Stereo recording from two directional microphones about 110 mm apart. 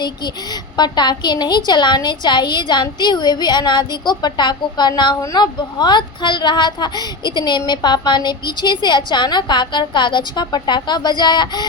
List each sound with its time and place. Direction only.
0.8 s a woman's voice: 40° left (ahead or behind)